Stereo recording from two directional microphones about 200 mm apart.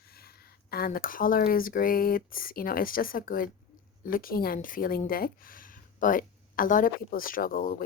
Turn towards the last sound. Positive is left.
turn(degrees=45)  # may be behind; listen again after turning